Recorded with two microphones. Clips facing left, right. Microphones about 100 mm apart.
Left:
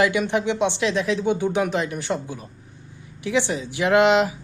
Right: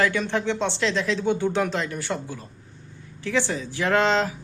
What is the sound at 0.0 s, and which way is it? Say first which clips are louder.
A woman's voice: left 3 dB; 15° left (ahead or behind).